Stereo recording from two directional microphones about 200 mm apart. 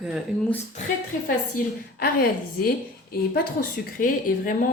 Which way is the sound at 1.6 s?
45° left (ahead or behind).